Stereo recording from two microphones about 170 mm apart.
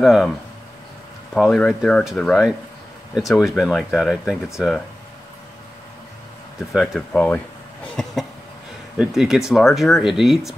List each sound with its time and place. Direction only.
0.0 s speech: centre (ahead or behind)
1.3 s speech: 5° left (ahead or behind)
6.7 s speech: centre (ahead or behind)